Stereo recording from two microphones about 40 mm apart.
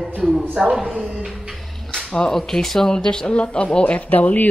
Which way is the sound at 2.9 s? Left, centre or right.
Centre.